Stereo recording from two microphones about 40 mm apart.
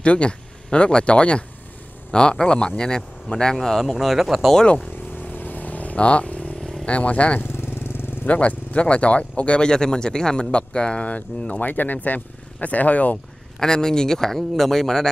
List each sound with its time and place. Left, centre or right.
0.0 s speech: left
3.5 s speech: centre
3.8 s speech: centre
5.3 s vehicle: left
6.6 s vehicle: centre
6.9 s speech: left
7.4 s vehicle: left
8.3 s speech: left
9.7 s speech: centre; by 11.7 s left
11.7 s speech: left
13.6 s speech: centre